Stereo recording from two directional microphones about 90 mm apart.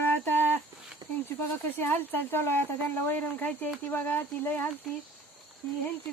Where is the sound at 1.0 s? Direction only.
50° right (ahead or behind).